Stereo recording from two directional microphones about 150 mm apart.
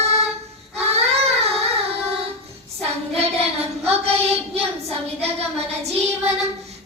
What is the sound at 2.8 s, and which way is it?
Child singing, 40° right (ahead or behind).